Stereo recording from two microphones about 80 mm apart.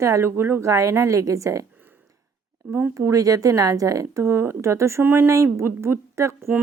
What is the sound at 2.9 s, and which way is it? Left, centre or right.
A woman's voice, right.